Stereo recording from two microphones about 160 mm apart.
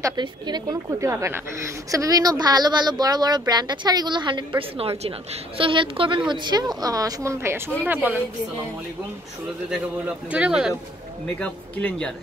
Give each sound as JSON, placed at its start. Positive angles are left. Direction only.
{"t": 0.0, "sound": "a woman's voice", "side_deg": -25}
{"t": 9.7, "sound": "speech", "side_deg": -5}
{"t": 11.3, "sound": "speech", "side_deg": 5}